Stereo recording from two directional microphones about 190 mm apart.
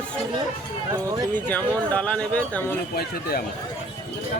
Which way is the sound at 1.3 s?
10° left (ahead or behind).